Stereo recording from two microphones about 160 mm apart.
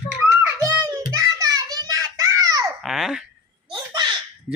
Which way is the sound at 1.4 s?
20° right (ahead or behind).